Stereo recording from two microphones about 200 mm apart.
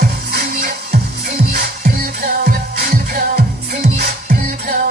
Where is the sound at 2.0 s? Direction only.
50° right (ahead or behind).